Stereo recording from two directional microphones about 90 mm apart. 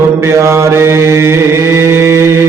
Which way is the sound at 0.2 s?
30° right (ahead or behind).